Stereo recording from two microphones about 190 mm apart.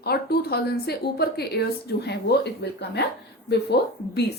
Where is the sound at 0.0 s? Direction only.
55° left (ahead or behind).